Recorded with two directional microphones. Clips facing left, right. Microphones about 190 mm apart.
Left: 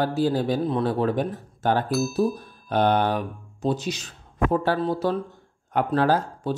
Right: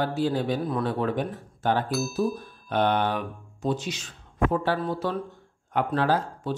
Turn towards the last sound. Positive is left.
turn(degrees=40)  # may be behind; listen again after turning